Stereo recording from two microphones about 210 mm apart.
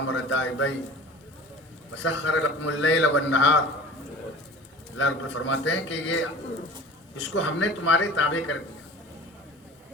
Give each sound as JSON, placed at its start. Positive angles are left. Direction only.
{"t": 0.1, "sound": "a man's voice", "side_deg": 60}
{"t": 2.0, "sound": "a man's voice", "side_deg": 65}
{"t": 4.9, "sound": "a man's voice", "side_deg": 60}
{"t": 7.3, "sound": "a man's voice", "side_deg": 65}